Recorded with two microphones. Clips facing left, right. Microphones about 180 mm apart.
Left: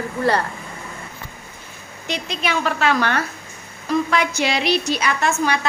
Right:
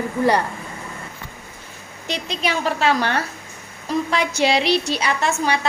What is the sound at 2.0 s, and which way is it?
A woman's voice, 35° right (ahead or behind).